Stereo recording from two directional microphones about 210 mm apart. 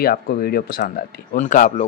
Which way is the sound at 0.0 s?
45° left (ahead or behind).